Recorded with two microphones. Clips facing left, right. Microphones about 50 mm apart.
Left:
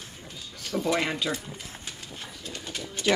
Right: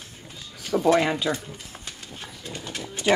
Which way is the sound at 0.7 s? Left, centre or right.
Right.